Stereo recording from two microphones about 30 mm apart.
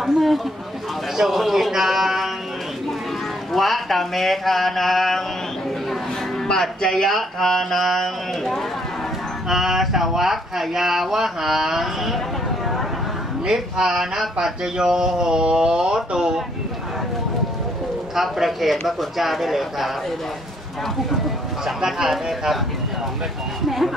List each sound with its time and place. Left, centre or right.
0.0 s speech: centre
3.5 s speech: centre
6.4 s music: centre
7.8 s speech: centre
9.5 s speech: centre
13.5 s speech: centre
13.9 s speech: centre
14.4 s speech: right
18.1 s speech: centre
21.8 s speech: centre